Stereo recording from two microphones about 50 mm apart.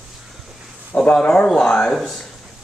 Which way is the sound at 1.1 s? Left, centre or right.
Left.